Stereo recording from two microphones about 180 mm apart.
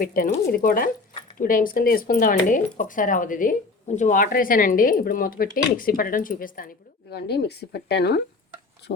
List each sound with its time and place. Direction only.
0.0 s speech: 50° left (ahead or behind)
7.1 s speech: 65° left (ahead or behind)